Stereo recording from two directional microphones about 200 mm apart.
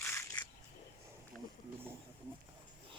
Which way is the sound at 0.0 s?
15° left (ahead or behind).